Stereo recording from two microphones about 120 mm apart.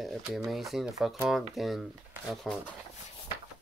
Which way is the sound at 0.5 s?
Centre (ahead or behind).